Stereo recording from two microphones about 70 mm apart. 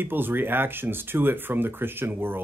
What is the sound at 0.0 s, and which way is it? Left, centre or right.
Speech, right.